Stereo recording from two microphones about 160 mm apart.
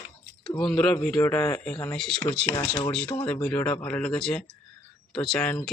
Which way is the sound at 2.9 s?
5° left (ahead or behind).